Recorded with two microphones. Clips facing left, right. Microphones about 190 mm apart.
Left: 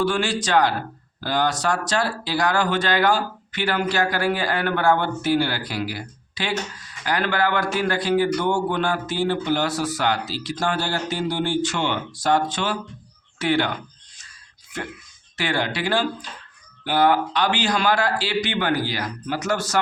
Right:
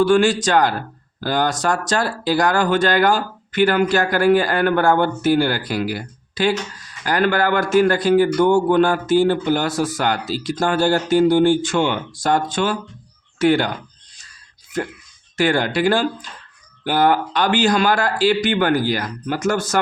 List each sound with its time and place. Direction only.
0.0 s a man's voice: 50° right (ahead or behind)
15.4 s a man's voice: 45° right (ahead or behind)